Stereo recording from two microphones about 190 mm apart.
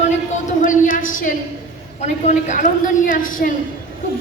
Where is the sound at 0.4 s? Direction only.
40° left (ahead or behind).